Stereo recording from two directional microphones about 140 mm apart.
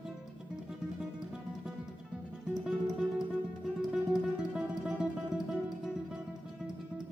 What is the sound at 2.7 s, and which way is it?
Music, 5° right (ahead or behind).